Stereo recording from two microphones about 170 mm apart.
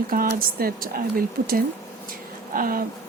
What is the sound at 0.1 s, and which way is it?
Speech, 60° right (ahead or behind).